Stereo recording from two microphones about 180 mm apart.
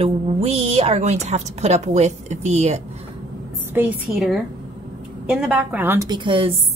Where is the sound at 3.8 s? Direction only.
10° right (ahead or behind).